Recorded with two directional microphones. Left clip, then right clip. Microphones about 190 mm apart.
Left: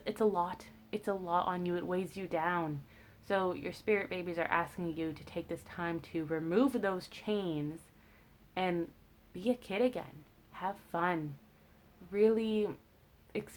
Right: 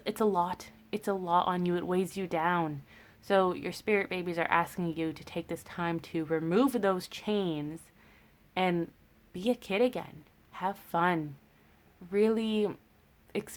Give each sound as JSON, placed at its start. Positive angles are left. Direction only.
{"t": 0.0, "sound": "a woman's voice", "side_deg": -35}